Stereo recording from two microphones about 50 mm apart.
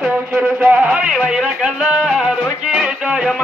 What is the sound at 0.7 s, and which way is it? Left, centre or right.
Speech, right.